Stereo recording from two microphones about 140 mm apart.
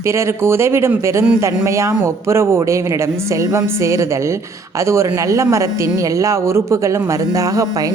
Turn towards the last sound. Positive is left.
turn(degrees=-25)  # may be behind; listen again after turning